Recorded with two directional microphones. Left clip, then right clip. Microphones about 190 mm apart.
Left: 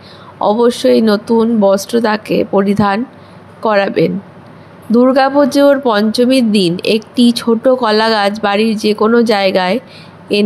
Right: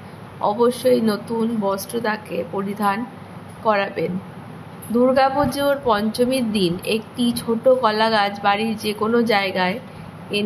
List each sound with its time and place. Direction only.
0.4 s speech: 40° left (ahead or behind)